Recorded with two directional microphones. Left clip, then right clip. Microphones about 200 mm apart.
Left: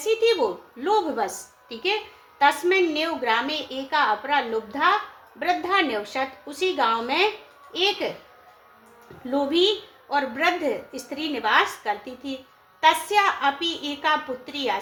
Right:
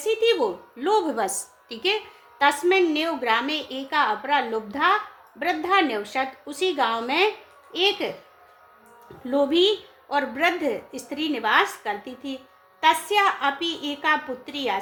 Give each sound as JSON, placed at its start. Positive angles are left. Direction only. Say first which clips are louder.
{"t": 0.0, "sound": "a woman's voice", "louder": "even", "side_deg": -30}
{"t": 9.2, "sound": "a woman's voice", "louder": "right 1 dB", "side_deg": -30}